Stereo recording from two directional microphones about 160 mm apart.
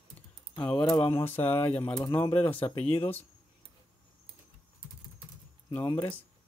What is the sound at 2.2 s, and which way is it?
Speech, 35° left (ahead or behind).